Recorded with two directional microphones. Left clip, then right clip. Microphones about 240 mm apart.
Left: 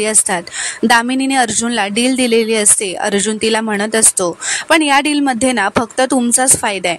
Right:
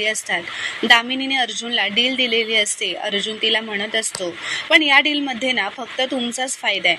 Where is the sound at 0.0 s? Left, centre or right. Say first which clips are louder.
Left 4 dB; left.